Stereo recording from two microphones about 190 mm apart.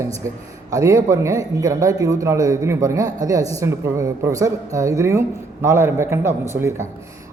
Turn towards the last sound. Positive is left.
turn(degrees=-15)  # may be behind; listen again after turning